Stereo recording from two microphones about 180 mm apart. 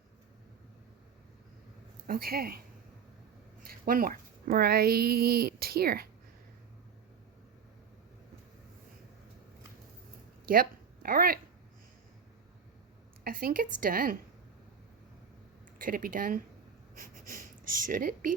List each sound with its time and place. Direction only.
2.0 s a woman's voice: 55° right (ahead or behind)
3.6 s speech: 55° right (ahead or behind)
10.5 s a woman's voice: 50° right (ahead or behind)
13.2 s a woman's voice: 55° right (ahead or behind)
15.8 s a woman's voice: 50° right (ahead or behind)
17.2 s a sound: 50° right (ahead or behind)